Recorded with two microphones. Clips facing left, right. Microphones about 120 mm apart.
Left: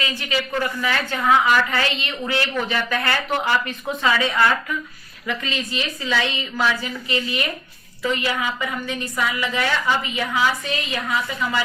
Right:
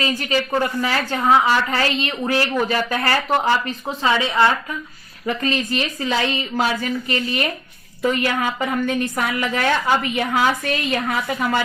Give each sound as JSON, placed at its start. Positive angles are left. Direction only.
{"t": 0.0, "sound": "a woman's voice", "side_deg": -40}
{"t": 5.2, "sound": "a woman's voice", "side_deg": -40}